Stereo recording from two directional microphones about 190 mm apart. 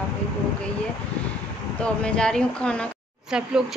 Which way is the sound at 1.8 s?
5° left (ahead or behind).